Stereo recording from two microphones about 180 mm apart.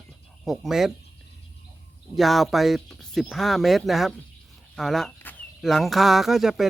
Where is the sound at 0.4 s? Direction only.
Centre (ahead or behind).